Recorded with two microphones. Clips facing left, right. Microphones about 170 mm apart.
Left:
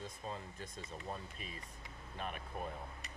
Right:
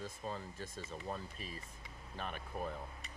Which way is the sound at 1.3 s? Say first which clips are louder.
Right 2 dB; 35° right (ahead or behind).